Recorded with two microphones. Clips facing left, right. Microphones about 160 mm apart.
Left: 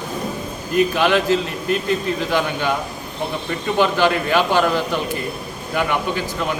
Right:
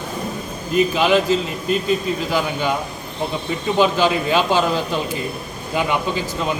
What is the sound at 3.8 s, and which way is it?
A man's voice, 15° right (ahead or behind).